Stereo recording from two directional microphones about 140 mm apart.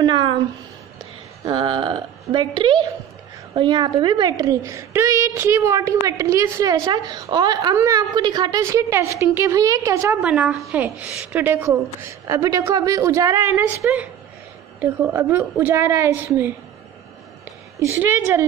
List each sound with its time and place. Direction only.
0.0 s speech: 35° right (ahead or behind)
1.4 s a woman's voice: 35° right (ahead or behind)
10.2 s a woman's voice: 5° right (ahead or behind)
17.7 s a woman's voice: 15° right (ahead or behind)